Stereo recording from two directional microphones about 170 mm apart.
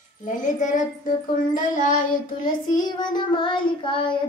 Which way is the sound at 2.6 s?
25° left (ahead or behind).